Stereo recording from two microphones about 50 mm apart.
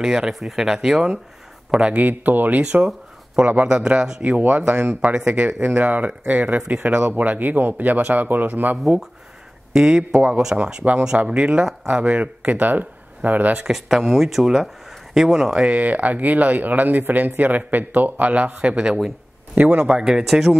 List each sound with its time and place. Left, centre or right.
0.0 s speech: centre
2.0 s speech: right
2.6 s speech: centre
4.2 s speech: right
9.7 s speech: centre; by 13.5 s right
13.7 s speech: centre
15.6 s speech: right
19.5 s speech: right
19.9 s speech: centre
20.2 s speech: centre